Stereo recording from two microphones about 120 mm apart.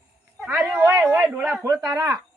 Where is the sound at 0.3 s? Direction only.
5° right (ahead or behind).